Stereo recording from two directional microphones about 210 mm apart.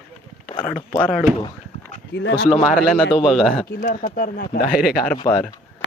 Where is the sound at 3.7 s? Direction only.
45° left (ahead or behind).